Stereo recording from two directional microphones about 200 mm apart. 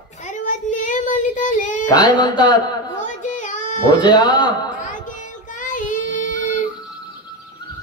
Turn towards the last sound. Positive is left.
turn(degrees=40)  # may be behind; listen again after turning